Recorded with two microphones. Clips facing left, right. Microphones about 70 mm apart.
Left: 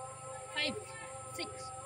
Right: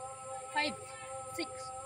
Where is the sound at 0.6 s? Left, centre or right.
Right.